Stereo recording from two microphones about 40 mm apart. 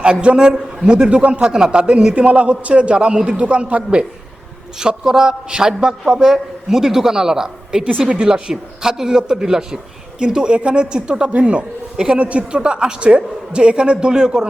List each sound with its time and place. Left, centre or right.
0.0 s a man's voice: right
2.1 s a man's voice: right
4.8 s a man's voice: centre
11.3 s speech: right
11.9 s a man's voice: right